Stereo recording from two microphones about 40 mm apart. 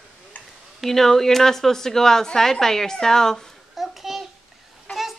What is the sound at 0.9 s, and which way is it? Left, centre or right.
A woman's voice, centre.